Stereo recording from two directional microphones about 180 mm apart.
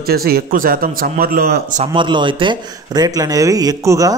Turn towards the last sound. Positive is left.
turn(degrees=-20)  # may be behind; listen again after turning